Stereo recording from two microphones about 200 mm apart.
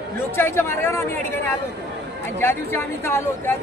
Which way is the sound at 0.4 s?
10° left (ahead or behind).